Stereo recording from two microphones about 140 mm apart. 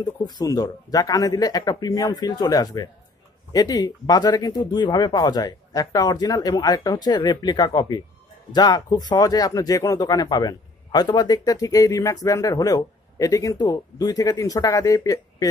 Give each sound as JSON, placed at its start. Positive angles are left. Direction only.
{"t": 0.0, "sound": "speech", "side_deg": 30}